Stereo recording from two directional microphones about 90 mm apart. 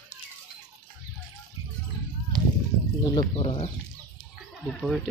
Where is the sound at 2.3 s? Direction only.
50° right (ahead or behind).